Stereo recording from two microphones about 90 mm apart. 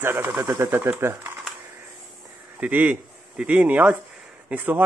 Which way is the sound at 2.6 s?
15° right (ahead or behind).